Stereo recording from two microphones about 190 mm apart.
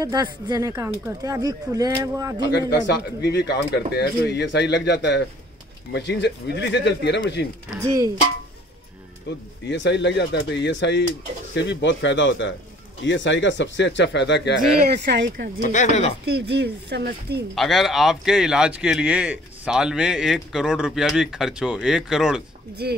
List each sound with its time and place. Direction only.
0.0 s speech: 20° right (ahead or behind)
2.7 s speech: 60° left (ahead or behind)
9.3 s speech: 70° left (ahead or behind)
14.8 s speech: 65° right (ahead or behind)
15.6 s speech: 40° left (ahead or behind)
16.3 s speech: 60° right (ahead or behind)
17.6 s speech: centre (ahead or behind)
22.8 s speech: 60° right (ahead or behind)